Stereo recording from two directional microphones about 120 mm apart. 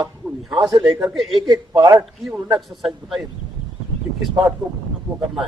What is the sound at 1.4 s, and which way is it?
Speech, 35° right (ahead or behind).